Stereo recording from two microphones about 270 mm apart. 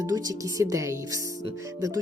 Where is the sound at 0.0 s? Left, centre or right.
Centre.